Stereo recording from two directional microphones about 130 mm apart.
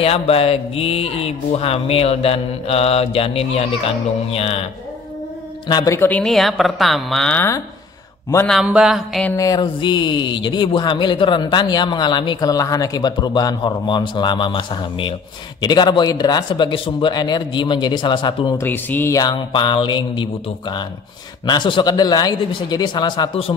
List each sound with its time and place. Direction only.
0.0 s speech: 50° left (ahead or behind)
5.7 s speech: 30° left (ahead or behind)
5.9 s speech: 10° left (ahead or behind)
7.3 s speech: 20° left (ahead or behind)
8.5 s speech: 5° right (ahead or behind)
9.3 s speech: 25° left (ahead or behind)
18.6 s speech: 15° left (ahead or behind)
19.1 s speech: 35° left (ahead or behind)